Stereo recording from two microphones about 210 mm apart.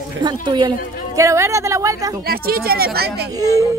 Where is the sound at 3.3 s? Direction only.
15° right (ahead or behind).